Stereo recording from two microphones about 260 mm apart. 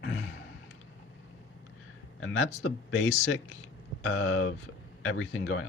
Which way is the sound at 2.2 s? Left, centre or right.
Left.